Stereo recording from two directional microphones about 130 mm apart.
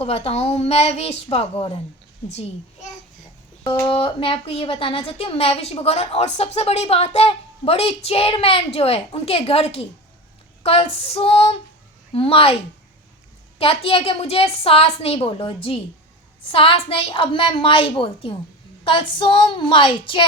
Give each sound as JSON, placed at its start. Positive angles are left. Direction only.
{"t": 0.0, "sound": "a woman's voice", "side_deg": 50}
{"t": 2.3, "sound": "a child's voice", "side_deg": 60}
{"t": 3.8, "sound": "a woman's voice", "side_deg": 45}
{"t": 13.6, "sound": "a woman's voice", "side_deg": 45}